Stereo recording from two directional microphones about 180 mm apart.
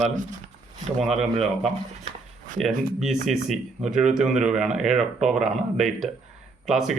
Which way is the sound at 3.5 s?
5° right (ahead or behind).